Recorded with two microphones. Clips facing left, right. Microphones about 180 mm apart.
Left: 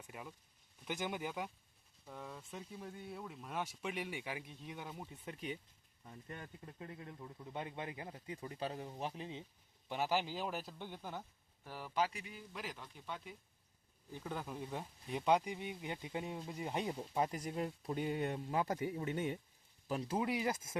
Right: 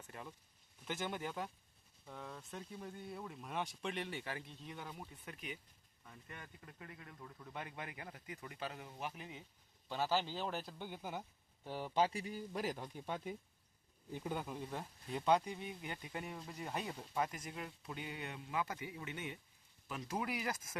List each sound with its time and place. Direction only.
0.0 s a sound: 10° left (ahead or behind)
0.9 s speech: 15° left (ahead or behind)
9.9 s a man's voice: 15° left (ahead or behind); by 11.3 s 10° right (ahead or behind)
11.6 s speech: 25° right (ahead or behind); by 13.3 s 45° right (ahead or behind)
14.3 s speech: centre (ahead or behind); by 17.3 s 20° left (ahead or behind)
17.3 s speech: 35° left (ahead or behind)